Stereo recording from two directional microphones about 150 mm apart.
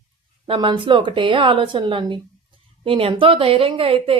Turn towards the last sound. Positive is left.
turn(degrees=-40)  # may be behind; listen again after turning